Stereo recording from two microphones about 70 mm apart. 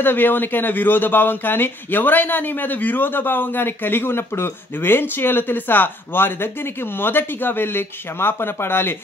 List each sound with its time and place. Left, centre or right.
0.0 s speech: left